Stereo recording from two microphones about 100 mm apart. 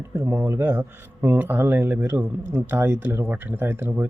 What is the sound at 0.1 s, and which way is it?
Speech, 25° right (ahead or behind).